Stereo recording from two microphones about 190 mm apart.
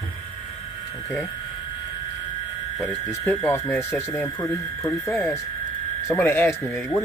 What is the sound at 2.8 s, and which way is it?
Speech, 15° left (ahead or behind).